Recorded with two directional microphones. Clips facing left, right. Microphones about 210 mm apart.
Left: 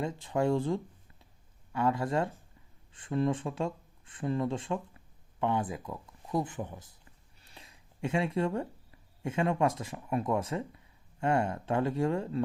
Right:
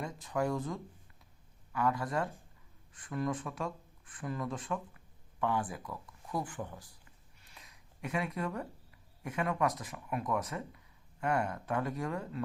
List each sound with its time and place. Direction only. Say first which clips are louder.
0.0 s speech: left 5 dB; 30° left (ahead or behind)
7.4 s a sound: left 4 dB; 30° left (ahead or behind)
9.2 s speech: left 4 dB; 25° left (ahead or behind)